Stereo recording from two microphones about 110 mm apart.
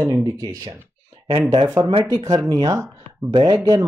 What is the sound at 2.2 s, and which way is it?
Speech, 35° right (ahead or behind).